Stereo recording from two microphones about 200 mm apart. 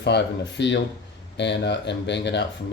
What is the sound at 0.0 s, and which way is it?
Speech, 55° left (ahead or behind).